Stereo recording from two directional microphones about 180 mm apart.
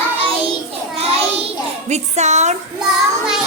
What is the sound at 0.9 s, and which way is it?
Child singing, 35° right (ahead or behind).